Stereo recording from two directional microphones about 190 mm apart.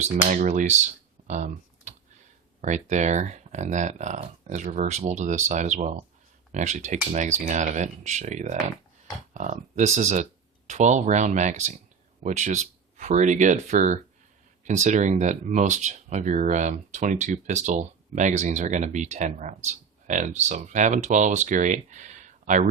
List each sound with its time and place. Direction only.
0.3 s speech: 40° right (ahead or behind)
1.3 s typing: 40° right (ahead or behind)
2.6 s speech: 40° right (ahead or behind)